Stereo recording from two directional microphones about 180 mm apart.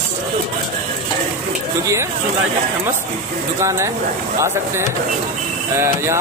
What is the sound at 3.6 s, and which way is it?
Speech, 15° right (ahead or behind).